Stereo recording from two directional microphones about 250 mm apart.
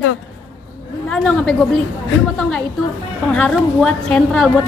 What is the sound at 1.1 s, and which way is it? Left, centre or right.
Speech, centre.